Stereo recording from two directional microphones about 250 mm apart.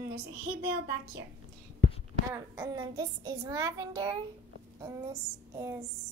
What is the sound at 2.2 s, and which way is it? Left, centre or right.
Child singing, centre.